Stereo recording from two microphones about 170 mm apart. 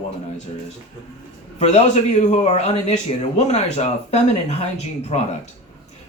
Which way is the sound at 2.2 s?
40° left (ahead or behind).